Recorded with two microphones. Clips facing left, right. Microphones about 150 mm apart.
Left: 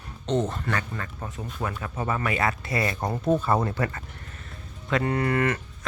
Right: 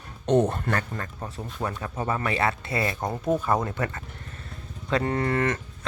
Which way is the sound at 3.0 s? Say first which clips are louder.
Left 3 dB; 5° right (ahead or behind).